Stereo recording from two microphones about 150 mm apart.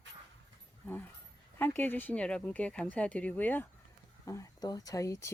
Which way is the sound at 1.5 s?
15° left (ahead or behind).